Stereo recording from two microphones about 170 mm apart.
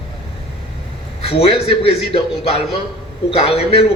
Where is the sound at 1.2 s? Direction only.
35° left (ahead or behind).